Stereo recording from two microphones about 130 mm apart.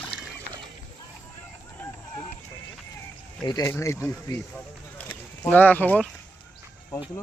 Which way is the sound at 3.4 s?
30° left (ahead or behind).